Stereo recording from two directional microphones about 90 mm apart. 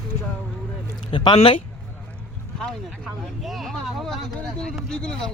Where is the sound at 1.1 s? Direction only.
65° left (ahead or behind).